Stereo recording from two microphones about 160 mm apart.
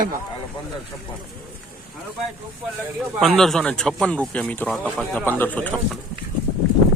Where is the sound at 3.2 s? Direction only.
Centre (ahead or behind).